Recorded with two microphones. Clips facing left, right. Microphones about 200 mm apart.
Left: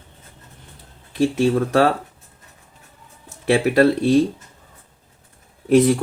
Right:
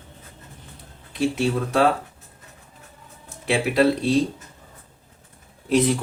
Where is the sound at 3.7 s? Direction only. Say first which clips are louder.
Left 2 dB; 55° left (ahead or behind).